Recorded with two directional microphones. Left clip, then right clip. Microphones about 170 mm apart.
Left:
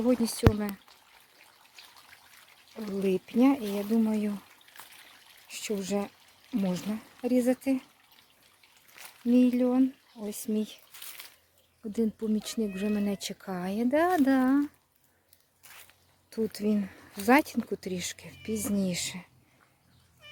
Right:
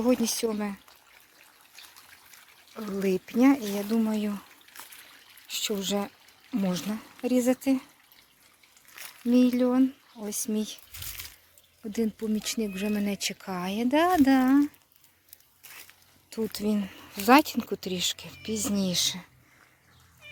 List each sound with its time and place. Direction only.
0.0 s speech: centre (ahead or behind)
2.7 s speech: 15° right (ahead or behind)
3.2 s speech: 5° left (ahead or behind)
5.5 s speech: centre (ahead or behind)
9.0 s a sound: 60° right (ahead or behind)
9.3 s speech: centre (ahead or behind)
11.9 s speech: 5° left (ahead or behind)
16.3 s speech: 5° left (ahead or behind)